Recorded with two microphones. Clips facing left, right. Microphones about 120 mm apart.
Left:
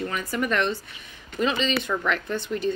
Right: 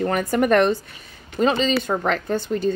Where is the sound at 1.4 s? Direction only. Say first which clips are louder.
Right 5 dB; 40° right (ahead or behind).